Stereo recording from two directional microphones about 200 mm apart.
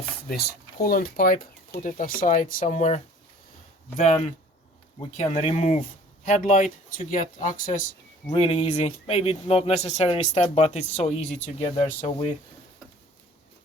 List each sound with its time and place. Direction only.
0.3 s speech: 50° left (ahead or behind); by 3.0 s 35° left (ahead or behind)
4.9 s speech: 30° left (ahead or behind)